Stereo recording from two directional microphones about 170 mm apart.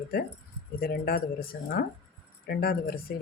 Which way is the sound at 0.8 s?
60° left (ahead or behind).